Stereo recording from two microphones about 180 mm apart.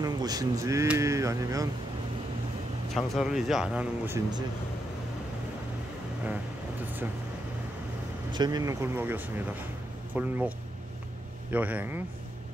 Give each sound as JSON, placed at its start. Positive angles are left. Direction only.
{"t": 0.0, "sound": "speech", "side_deg": -20}
{"t": 2.9, "sound": "speech", "side_deg": 0}
{"t": 8.3, "sound": "speech", "side_deg": -25}
{"t": 11.5, "sound": "speech", "side_deg": -10}